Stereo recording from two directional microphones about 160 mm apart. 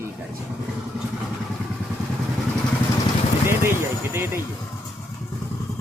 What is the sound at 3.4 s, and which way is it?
Speech, 15° right (ahead or behind).